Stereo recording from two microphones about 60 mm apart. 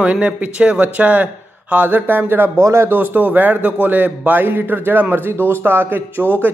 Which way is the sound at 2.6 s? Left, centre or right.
Right.